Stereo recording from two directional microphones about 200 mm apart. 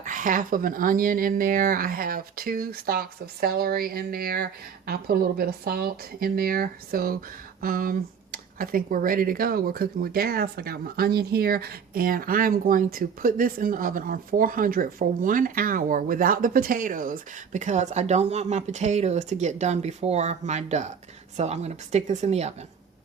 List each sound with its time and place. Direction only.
0.0 s speech: 40° right (ahead or behind)